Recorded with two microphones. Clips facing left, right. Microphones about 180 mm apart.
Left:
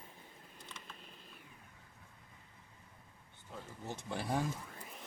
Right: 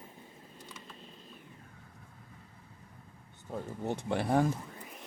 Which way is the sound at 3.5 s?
60° right (ahead or behind).